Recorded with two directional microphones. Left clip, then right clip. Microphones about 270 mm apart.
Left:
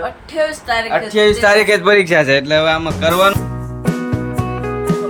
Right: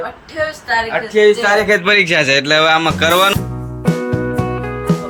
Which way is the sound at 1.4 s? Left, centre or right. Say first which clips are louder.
Left 2 dB; left.